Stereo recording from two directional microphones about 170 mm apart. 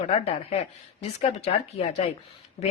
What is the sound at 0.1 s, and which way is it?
Speech, 35° left (ahead or behind).